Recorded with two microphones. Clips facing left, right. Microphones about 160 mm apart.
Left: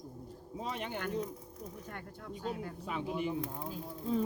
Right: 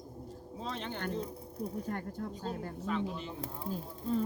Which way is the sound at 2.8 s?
10° left (ahead or behind).